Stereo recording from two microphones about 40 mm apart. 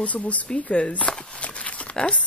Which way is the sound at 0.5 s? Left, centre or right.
Left.